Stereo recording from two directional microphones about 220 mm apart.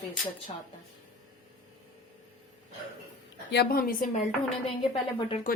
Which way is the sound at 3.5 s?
45° left (ahead or behind).